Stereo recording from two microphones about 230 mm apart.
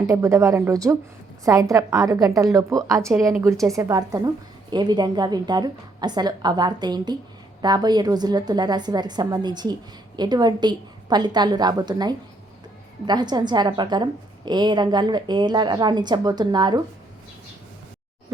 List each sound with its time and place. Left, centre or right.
0.1 s a woman's voice: centre